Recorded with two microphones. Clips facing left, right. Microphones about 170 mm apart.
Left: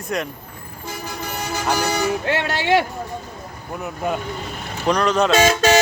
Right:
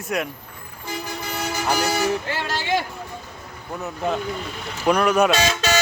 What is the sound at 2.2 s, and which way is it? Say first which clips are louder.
Speech: left 6 dB; 65° left (ahead or behind).